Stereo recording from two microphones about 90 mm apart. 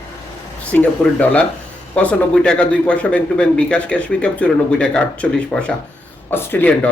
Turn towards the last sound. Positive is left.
turn(degrees=20)  # may be behind; listen again after turning